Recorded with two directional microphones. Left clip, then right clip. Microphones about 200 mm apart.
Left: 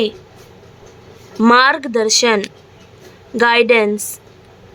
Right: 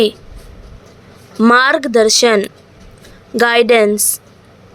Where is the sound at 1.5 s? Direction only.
15° right (ahead or behind).